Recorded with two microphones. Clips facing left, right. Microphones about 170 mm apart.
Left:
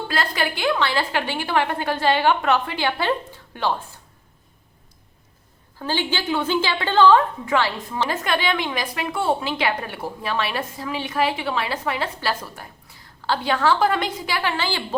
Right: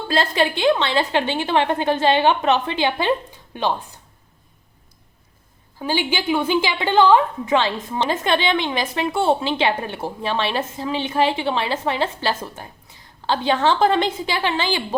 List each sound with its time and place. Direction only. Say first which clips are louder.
0.1 s a woman's voice: right 7 dB; 25° right (ahead or behind)
5.8 s a woman's voice: right 3 dB; 15° right (ahead or behind)